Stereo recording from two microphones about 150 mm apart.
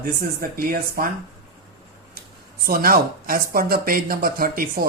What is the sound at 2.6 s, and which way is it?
Speech, 80° right.